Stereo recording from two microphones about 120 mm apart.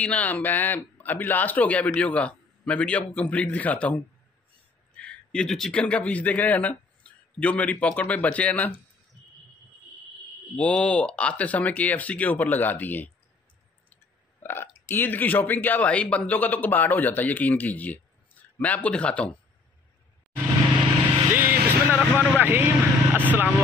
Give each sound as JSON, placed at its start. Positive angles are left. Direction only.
{"t": 0.0, "sound": "a man's voice", "side_deg": 10}
{"t": 10.5, "sound": "a man's voice", "side_deg": 5}
{"t": 14.4, "sound": "burping", "side_deg": 20}
{"t": 14.9, "sound": "a man's voice", "side_deg": 15}
{"t": 21.3, "sound": "vehicle", "side_deg": -15}
{"t": 23.2, "sound": "speech", "side_deg": -15}